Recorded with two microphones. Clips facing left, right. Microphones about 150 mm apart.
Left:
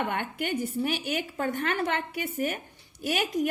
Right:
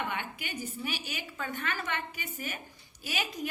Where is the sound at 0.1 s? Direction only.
55° left (ahead or behind).